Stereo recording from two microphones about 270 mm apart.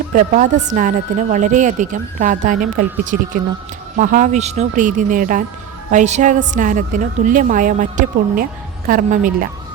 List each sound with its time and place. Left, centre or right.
0.1 s a woman's voice: right